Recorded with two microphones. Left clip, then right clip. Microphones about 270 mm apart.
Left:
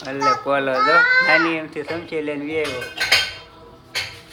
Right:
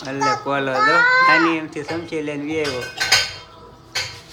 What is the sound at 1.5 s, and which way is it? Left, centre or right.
Speech, centre.